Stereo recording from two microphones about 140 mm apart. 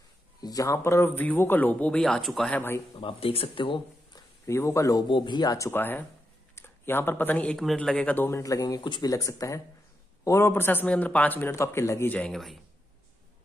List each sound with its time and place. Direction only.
0.4 s speech: 25° left (ahead or behind); by 2.6 s 5° left (ahead or behind)
2.9 s speech: 40° left (ahead or behind)
4.5 s speech: 20° left (ahead or behind)
5.0 s speech: 35° left (ahead or behind)
5.7 s speech: 15° left (ahead or behind)